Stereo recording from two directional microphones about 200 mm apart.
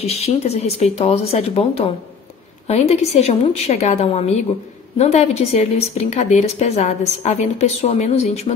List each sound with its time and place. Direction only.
0.0 s a woman's voice: 30° left (ahead or behind)